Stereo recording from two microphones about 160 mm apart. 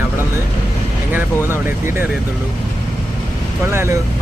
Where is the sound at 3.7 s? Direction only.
15° right (ahead or behind).